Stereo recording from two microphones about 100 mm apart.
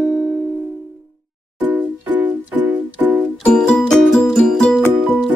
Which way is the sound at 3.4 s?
10° left (ahead or behind).